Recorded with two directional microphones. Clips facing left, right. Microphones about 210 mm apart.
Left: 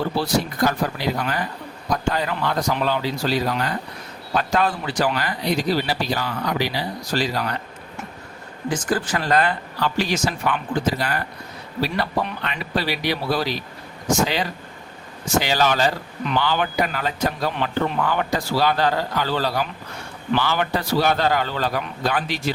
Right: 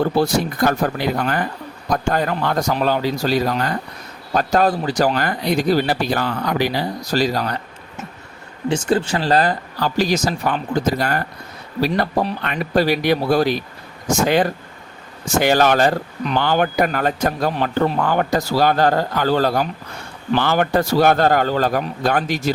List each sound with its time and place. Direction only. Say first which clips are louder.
0.0 s a man's voice: right 5 dB; 50° right (ahead or behind)
8.7 s a man's voice: right 5 dB; 25° right (ahead or behind); by 22.5 s 45° right (ahead or behind)